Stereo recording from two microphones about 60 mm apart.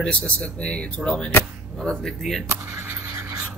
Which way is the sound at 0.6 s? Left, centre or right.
Centre.